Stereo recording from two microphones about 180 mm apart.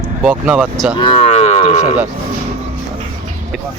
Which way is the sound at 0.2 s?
10° right (ahead or behind).